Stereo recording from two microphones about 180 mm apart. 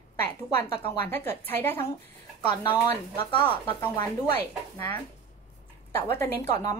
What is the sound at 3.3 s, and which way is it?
Speech, 25° left (ahead or behind).